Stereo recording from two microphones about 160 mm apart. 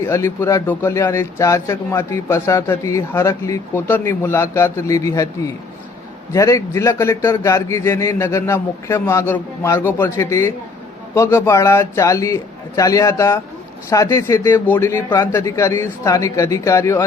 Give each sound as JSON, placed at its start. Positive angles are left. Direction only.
{"t": 0.0, "sound": "speech", "side_deg": 15}
{"t": 6.3, "sound": "a man's voice", "side_deg": 20}